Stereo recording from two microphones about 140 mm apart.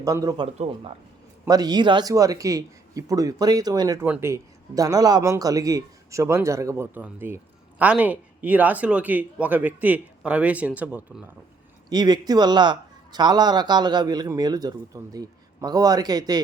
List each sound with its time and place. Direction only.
0.0 s speech: 25° right (ahead or behind)
1.5 s speech: 30° right (ahead or behind)
4.0 s speech: 15° right (ahead or behind)
11.9 s speech: 30° right (ahead or behind)